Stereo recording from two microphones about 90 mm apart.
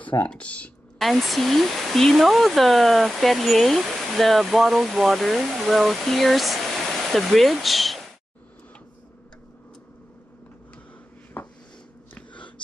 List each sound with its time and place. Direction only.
0.2 s speech: 15° left (ahead or behind)
0.9 s speech: centre (ahead or behind)
11.4 s a sound: 15° left (ahead or behind)